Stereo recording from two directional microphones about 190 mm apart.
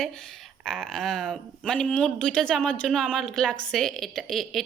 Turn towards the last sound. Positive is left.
turn(degrees=0)  # may be behind; listen again after turning